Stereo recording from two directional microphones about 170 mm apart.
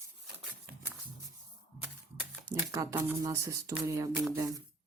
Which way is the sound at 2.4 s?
20° right (ahead or behind).